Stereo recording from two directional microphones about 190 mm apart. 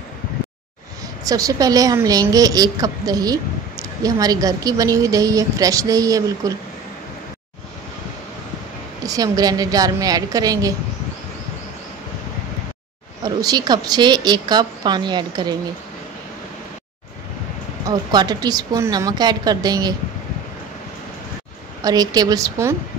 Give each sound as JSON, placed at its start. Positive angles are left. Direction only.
{"t": 1.2, "sound": "a woman's voice", "side_deg": -20}
{"t": 9.0, "sound": "a woman's voice", "side_deg": -20}
{"t": 13.2, "sound": "a woman's voice", "side_deg": -20}
{"t": 17.8, "sound": "a woman's voice", "side_deg": -20}
{"t": 21.8, "sound": "a woman's voice", "side_deg": -20}